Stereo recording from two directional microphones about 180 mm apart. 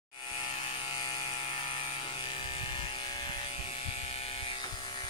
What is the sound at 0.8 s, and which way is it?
Mechanisms, 25° left (ahead or behind).